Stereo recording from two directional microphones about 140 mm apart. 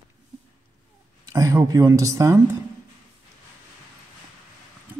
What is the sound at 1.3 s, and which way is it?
Speech, 25° right (ahead or behind).